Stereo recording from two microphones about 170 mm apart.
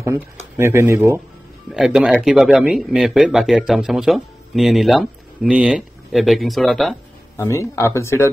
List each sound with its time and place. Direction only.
0.6 s speech: 15° right (ahead or behind); by 7.0 s centre (ahead or behind)
7.3 s speech: 15° left (ahead or behind)